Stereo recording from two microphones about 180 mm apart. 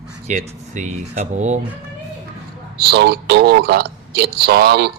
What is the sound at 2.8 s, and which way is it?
A man's voice, 65° right (ahead or behind).